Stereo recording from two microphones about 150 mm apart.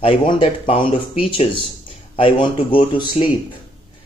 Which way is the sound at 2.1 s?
35° left (ahead or behind).